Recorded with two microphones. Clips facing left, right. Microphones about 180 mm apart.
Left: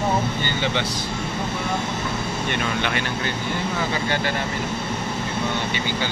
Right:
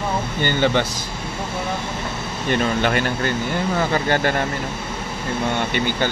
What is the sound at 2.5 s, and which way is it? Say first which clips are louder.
Speech: right 8 dB; 40° right (ahead or behind).